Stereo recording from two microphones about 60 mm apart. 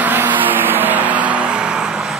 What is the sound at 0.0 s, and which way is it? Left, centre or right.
Vehicle, right.